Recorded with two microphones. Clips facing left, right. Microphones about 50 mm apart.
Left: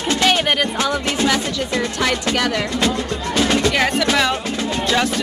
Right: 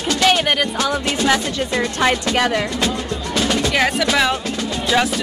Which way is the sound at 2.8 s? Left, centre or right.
Left.